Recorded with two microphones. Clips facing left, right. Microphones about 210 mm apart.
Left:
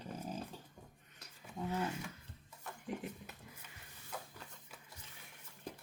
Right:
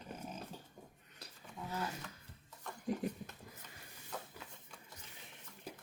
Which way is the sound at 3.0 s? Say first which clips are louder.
Right 6 dB; 40° right (ahead or behind).